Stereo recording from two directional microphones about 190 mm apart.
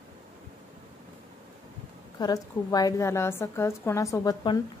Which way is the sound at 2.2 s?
20° left (ahead or behind).